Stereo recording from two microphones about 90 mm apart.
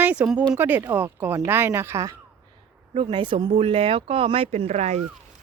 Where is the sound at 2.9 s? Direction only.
70° right (ahead or behind); by 4.7 s 90° right.